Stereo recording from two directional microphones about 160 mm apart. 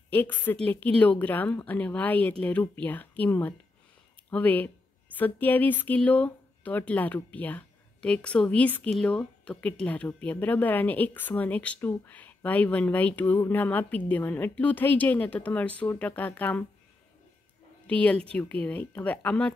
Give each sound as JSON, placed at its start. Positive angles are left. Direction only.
{"t": 0.1, "sound": "speech", "side_deg": 10}
{"t": 17.8, "sound": "speech", "side_deg": 10}